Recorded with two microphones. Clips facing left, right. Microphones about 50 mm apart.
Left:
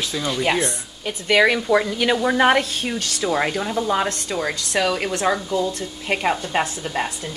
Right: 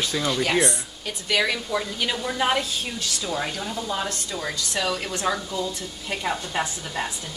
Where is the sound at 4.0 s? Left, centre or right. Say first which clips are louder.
Left 6 dB; left.